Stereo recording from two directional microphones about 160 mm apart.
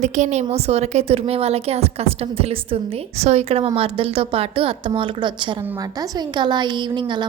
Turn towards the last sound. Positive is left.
turn(degrees=-30)  # may be behind; listen again after turning